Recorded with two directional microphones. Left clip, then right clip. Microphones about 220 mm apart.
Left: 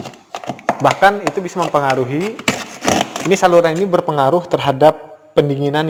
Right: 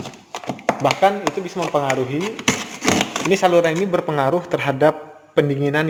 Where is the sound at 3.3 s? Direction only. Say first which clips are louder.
Left 4 dB; 15° left (ahead or behind).